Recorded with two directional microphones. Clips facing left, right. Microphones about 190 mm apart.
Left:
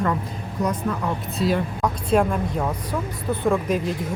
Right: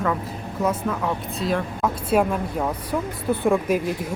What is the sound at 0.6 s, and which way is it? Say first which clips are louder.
A woman's voice: right 1 dB; 5° right (ahead or behind).